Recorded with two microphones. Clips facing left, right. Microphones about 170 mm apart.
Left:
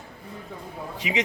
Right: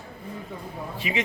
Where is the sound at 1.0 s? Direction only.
90° left.